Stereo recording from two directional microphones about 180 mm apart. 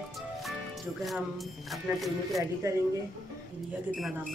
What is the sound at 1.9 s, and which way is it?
Speech, 15° right (ahead or behind).